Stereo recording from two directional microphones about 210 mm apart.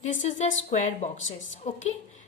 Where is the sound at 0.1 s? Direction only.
35° left (ahead or behind).